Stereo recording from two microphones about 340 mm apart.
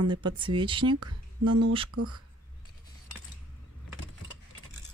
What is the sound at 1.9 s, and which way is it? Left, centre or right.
Speech, right.